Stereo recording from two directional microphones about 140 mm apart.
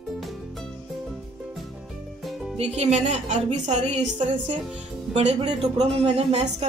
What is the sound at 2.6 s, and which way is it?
A woman's voice, 50° right (ahead or behind).